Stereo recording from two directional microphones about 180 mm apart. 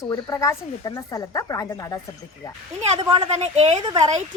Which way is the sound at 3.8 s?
20° right (ahead or behind).